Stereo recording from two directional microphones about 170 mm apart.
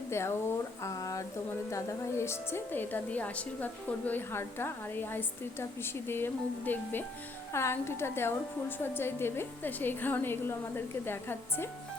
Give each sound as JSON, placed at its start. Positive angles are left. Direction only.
{"t": 0.1, "sound": "a woman's voice", "side_deg": 15}